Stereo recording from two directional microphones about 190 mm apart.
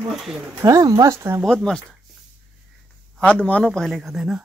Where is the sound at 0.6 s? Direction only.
15° right (ahead or behind).